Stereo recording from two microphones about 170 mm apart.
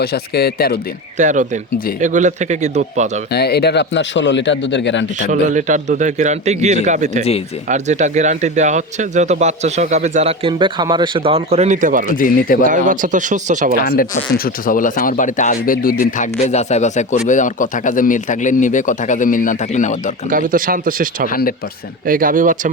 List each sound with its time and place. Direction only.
0.0 s speech: 70° left (ahead or behind)
1.2 s a man's voice: 45° right (ahead or behind)
3.3 s speech: 70° left (ahead or behind); by 5.0 s 90° left
5.3 s a man's voice: 45° right (ahead or behind)
12.0 s speech: 50° left (ahead or behind)
12.6 s a man's voice: 50° right (ahead or behind)
13.8 s a man's voice: 60° left (ahead or behind)
16.1 s a man's voice: 45° left (ahead or behind)
20.3 s speech: 55° right (ahead or behind)
21.2 s speech: 60° left (ahead or behind)
22.0 s a man's voice: 55° right (ahead or behind)